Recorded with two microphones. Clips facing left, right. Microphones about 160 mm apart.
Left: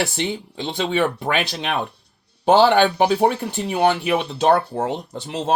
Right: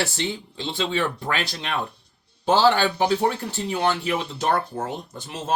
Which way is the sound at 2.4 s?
60° left (ahead or behind).